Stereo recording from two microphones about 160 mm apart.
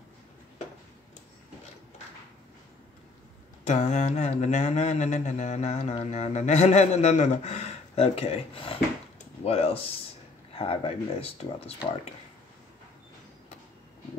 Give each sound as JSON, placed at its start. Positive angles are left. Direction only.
{"t": 3.6, "sound": "mantra", "side_deg": 45}
{"t": 9.4, "sound": "speech", "side_deg": 40}